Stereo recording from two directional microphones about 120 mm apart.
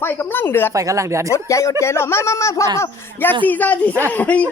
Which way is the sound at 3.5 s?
15° left (ahead or behind).